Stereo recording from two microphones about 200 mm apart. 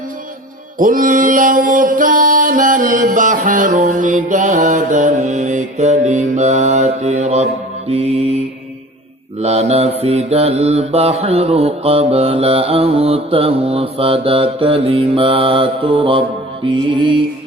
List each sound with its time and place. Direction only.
0.8 s music: 45° right (ahead or behind)
7.9 s mantra: 30° right (ahead or behind)
9.4 s mantra: 30° right (ahead or behind)